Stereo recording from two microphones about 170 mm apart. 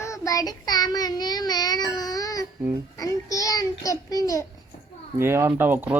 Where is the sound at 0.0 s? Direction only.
20° left (ahead or behind).